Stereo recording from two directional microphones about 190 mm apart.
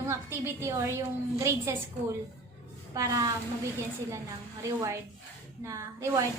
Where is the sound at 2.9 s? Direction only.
15° right (ahead or behind).